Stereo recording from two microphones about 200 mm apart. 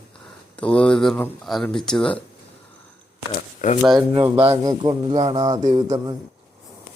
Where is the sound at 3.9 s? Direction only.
20° right (ahead or behind).